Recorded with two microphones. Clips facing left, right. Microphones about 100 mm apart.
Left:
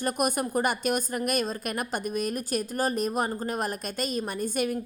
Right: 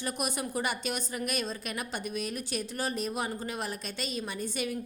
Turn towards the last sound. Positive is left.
turn(degrees=50)  # may be behind; listen again after turning